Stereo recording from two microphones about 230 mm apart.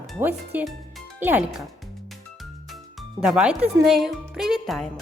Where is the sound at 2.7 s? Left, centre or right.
Centre.